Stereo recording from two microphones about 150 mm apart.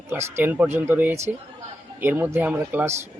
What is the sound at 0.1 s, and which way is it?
Speech, 15° right (ahead or behind).